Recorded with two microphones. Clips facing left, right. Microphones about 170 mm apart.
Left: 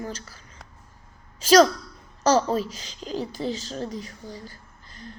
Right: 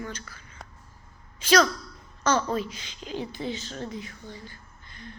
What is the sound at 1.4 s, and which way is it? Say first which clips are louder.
Speech: left 5 dB; 40° left (ahead or behind).